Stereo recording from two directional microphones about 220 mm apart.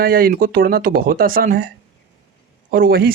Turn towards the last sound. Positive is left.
turn(degrees=-40)  # may be behind; listen again after turning